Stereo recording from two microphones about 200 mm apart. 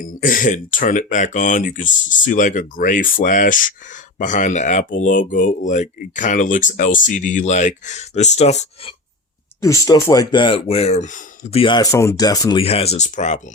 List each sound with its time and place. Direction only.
0.0 s speech: 45° left (ahead or behind)
9.6 s speech: 15° left (ahead or behind); by 13.4 s 35° left (ahead or behind)